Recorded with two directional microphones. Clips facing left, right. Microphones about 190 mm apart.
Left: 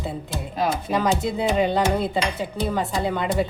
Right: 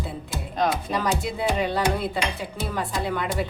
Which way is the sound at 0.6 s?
5° left (ahead or behind).